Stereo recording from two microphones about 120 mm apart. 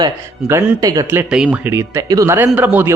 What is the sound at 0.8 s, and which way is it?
Speech, 30° right (ahead or behind).